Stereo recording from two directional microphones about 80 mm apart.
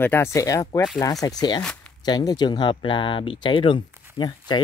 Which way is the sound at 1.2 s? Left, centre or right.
Left.